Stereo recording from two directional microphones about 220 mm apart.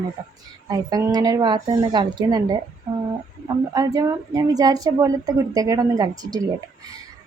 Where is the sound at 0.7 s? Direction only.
15° right (ahead or behind).